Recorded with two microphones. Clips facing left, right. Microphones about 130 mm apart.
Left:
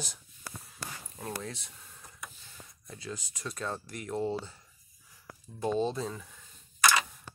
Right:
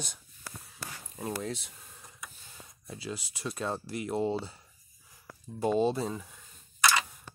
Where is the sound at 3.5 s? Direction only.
25° right (ahead or behind).